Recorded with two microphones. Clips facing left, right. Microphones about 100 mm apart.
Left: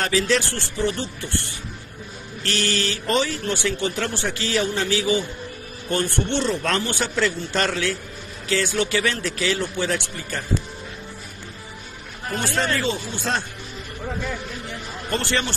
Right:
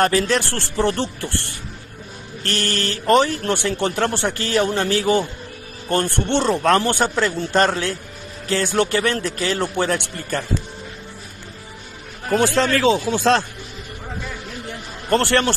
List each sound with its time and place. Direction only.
0.0 s speech: 55° right (ahead or behind)
2.4 s speech: 50° right (ahead or behind)
12.3 s speech: 85° right
15.0 s a man's voice: 65° right (ahead or behind)